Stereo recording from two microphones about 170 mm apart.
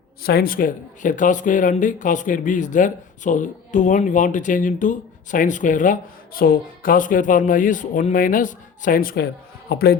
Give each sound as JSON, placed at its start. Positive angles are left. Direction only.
{"t": 0.2, "sound": "speech", "side_deg": 60}